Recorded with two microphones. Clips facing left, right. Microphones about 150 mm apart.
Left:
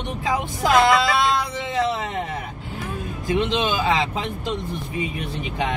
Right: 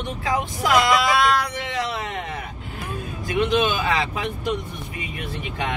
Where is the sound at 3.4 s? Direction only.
25° left (ahead or behind).